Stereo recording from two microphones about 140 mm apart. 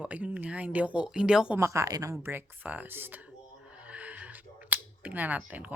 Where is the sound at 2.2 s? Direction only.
15° right (ahead or behind).